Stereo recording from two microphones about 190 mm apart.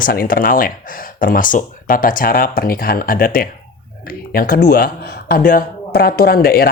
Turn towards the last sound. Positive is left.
turn(degrees=50)  # may be behind; listen again after turning